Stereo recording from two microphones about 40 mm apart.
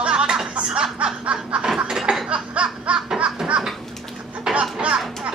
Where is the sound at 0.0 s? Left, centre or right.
Right.